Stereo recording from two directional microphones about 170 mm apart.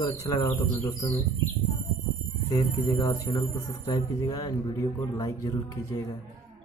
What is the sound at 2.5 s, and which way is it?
Speech, 20° left (ahead or behind).